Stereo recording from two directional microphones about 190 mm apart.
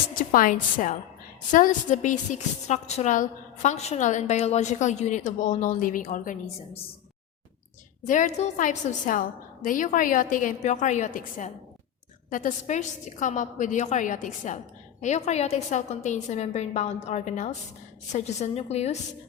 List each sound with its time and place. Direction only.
0.2 s a woman's voice: 45° left (ahead or behind)
8.0 s a woman's voice: 40° left (ahead or behind)